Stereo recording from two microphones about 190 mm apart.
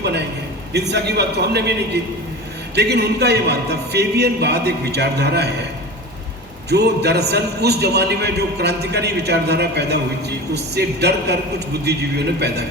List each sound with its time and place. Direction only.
0.7 s a man's voice: 60° right (ahead or behind)
6.7 s a man's voice: 60° right (ahead or behind)